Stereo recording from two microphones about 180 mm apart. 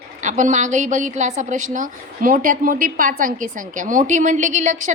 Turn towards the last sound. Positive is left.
turn(degrees=-45)  # may be behind; listen again after turning